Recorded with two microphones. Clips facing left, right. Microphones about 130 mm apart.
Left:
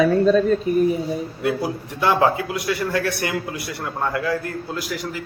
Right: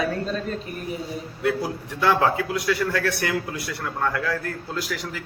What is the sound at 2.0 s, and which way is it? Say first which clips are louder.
A man's voice: left 2 dB; 15° left (ahead or behind).